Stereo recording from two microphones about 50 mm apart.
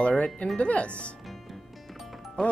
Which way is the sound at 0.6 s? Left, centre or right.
Left.